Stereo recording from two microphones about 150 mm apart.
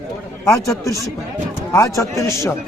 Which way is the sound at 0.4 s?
20° left (ahead or behind).